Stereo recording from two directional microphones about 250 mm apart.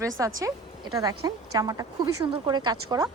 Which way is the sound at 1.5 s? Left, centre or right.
Centre.